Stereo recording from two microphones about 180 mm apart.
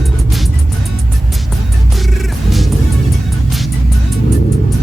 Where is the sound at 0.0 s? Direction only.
Centre (ahead or behind).